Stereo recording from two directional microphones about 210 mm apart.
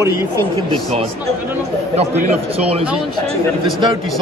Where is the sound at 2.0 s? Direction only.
30° right (ahead or behind).